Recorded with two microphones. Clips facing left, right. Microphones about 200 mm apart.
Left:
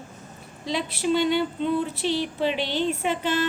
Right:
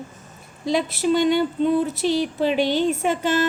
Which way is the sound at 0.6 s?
45° right (ahead or behind).